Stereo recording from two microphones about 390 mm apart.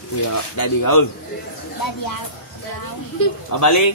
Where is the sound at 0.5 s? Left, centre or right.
Left.